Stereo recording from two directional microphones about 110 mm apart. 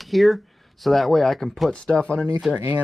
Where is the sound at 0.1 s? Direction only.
Centre (ahead or behind).